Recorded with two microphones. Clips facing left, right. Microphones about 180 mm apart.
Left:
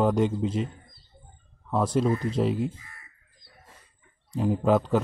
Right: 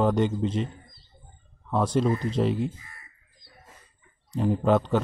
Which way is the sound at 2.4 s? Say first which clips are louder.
Even; 5° left (ahead or behind).